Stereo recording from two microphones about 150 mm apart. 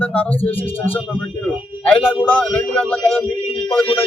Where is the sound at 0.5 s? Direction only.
40° left (ahead or behind).